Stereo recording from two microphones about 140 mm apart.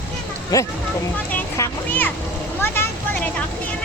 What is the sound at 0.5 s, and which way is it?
A child's voice, 25° left (ahead or behind).